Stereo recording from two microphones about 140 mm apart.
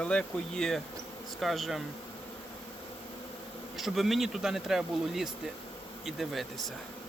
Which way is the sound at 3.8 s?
Centre (ahead or behind).